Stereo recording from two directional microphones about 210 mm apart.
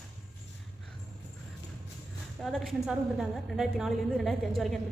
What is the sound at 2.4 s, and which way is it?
A woman's voice, centre (ahead or behind).